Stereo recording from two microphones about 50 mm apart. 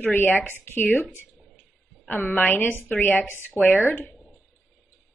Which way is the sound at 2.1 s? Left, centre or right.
Left.